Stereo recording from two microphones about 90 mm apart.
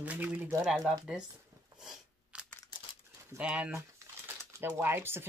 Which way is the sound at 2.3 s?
15° right (ahead or behind).